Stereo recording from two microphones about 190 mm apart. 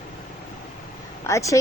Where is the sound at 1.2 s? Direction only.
15° left (ahead or behind).